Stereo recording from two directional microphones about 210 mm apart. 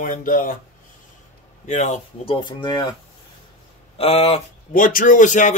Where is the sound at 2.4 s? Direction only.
20° left (ahead or behind).